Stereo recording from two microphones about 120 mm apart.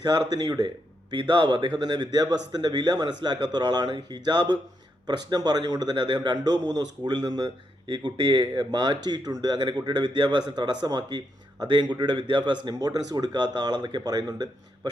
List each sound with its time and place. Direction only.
0.0 s a man's voice: 35° right (ahead or behind)